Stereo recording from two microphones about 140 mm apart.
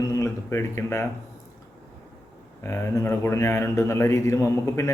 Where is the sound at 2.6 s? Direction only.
20° left (ahead or behind).